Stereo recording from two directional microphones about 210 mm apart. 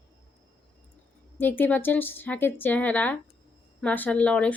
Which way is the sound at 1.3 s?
10° left (ahead or behind).